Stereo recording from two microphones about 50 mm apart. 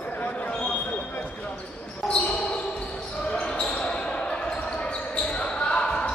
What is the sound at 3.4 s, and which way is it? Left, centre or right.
Basketball bounce, centre.